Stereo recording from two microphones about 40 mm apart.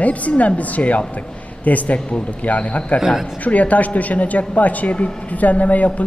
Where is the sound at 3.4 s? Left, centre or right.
Left.